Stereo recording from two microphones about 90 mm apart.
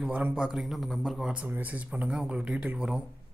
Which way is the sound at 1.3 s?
20° right (ahead or behind).